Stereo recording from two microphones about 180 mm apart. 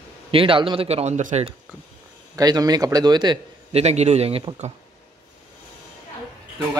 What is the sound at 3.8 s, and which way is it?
Speech, 35° right (ahead or behind).